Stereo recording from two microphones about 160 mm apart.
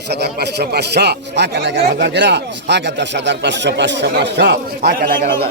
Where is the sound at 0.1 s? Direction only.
90° right; by 5.5 s 65° right (ahead or behind).